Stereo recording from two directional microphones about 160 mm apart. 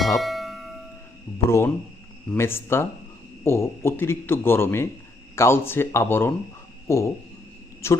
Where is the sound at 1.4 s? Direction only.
15° left (ahead or behind).